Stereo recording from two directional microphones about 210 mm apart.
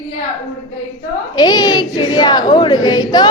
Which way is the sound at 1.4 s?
20° left (ahead or behind).